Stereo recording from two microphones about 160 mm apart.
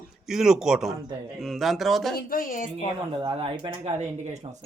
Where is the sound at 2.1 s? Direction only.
60° left (ahead or behind).